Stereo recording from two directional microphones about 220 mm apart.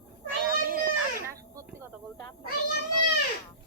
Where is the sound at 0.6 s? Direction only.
40° right (ahead or behind).